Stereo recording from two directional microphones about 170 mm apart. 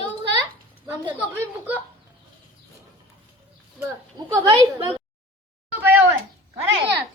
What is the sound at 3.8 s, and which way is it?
Speech, 15° right (ahead or behind).